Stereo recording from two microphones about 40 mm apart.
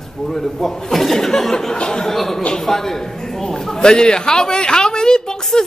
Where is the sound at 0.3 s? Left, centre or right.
Centre.